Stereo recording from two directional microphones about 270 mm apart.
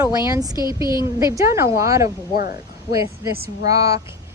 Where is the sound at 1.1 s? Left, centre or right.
Centre.